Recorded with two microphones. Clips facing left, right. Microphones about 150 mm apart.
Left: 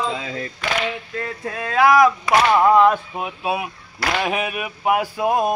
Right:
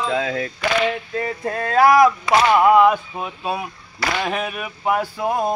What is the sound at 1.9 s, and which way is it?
Speech, 25° right (ahead or behind).